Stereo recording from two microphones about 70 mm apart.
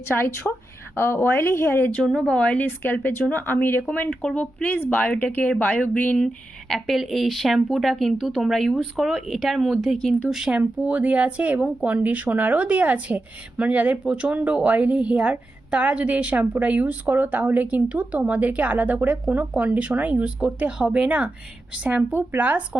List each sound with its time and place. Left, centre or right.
0.1 s speech: left
2.0 s speech: centre
4.1 s speech: centre
6.1 s a woman's voice: centre
10.2 s speech: centre
10.8 s speech: right
22.1 s speech: right